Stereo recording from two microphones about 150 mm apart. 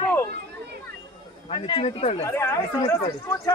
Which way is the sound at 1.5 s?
40° left (ahead or behind).